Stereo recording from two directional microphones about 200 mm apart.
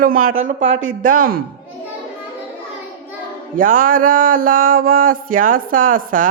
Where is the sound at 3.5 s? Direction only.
40° right (ahead or behind).